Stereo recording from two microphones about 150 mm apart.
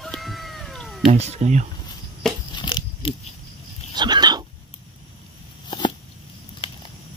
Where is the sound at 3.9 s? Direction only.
30° right (ahead or behind).